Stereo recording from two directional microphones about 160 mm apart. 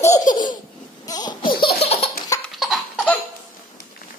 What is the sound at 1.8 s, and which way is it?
Laughter, 40° left (ahead or behind).